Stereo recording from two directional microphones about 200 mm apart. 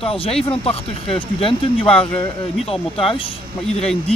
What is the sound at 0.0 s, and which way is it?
Speech, 30° left (ahead or behind).